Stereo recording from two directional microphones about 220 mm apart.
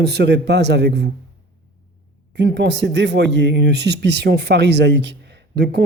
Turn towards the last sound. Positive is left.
turn(degrees=-50)  # may be behind; listen again after turning